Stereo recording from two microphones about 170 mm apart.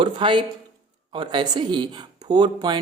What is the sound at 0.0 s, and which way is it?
A man's voice, 30° right (ahead or behind).